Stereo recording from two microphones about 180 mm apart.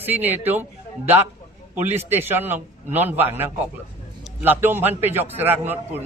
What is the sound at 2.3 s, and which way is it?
A man's voice, 10° right (ahead or behind).